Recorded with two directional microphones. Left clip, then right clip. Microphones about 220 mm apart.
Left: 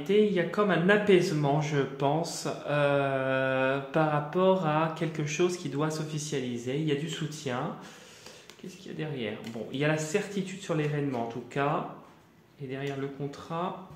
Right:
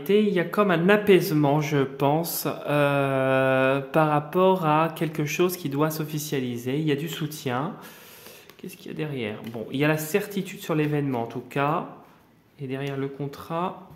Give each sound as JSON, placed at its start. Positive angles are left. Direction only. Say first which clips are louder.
{"t": 0.0, "sound": "speech", "louder": "right 3 dB", "side_deg": -50}
{"t": 8.8, "sound": "speech", "louder": "right 4 dB", "side_deg": -45}